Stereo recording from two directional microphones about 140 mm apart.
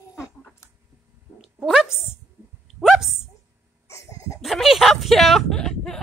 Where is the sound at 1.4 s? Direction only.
5° right (ahead or behind).